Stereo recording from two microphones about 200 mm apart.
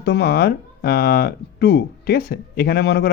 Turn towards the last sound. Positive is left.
turn(degrees=55)  # may be behind; listen again after turning